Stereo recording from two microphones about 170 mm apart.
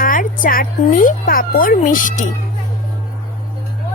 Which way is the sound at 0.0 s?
55° left (ahead or behind).